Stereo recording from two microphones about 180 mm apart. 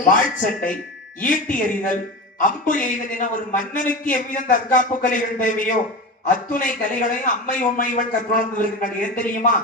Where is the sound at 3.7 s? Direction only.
45° left (ahead or behind).